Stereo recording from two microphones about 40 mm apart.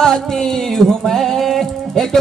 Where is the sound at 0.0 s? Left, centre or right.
Centre.